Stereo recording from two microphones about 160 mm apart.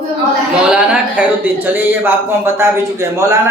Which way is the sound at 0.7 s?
10° right (ahead or behind).